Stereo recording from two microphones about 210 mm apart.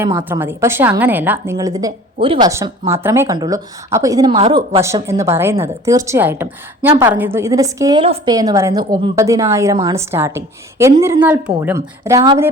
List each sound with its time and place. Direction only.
0.0 s a woman's voice: 15° right (ahead or behind)
2.5 s a woman's voice: 15° right (ahead or behind)